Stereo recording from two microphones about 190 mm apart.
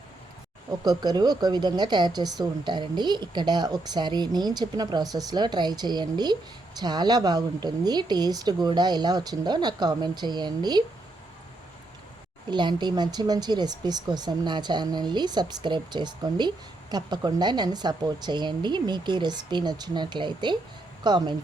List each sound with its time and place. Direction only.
0.9 s speech: 20° right (ahead or behind)
12.5 s speech: 25° right (ahead or behind)